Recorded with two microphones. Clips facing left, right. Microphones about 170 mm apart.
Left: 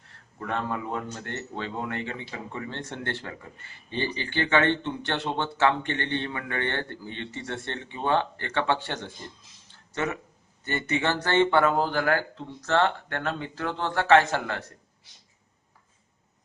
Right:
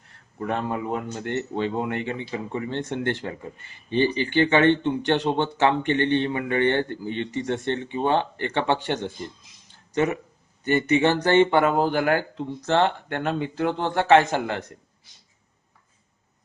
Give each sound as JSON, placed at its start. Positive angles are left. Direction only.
{"t": 0.3, "sound": "a man's voice", "side_deg": -20}
{"t": 9.6, "sound": "a sound", "side_deg": -15}
{"t": 10.6, "sound": "a man's voice", "side_deg": -15}